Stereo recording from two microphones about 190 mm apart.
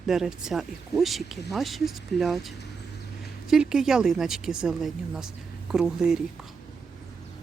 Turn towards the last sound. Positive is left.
turn(degrees=-5)  # may be behind; listen again after turning